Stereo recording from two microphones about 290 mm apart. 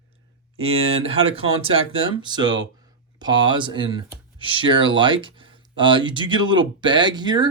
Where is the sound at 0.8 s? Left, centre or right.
Centre.